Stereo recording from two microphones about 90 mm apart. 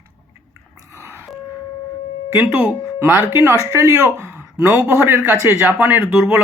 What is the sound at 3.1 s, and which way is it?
Speech, 25° right (ahead or behind).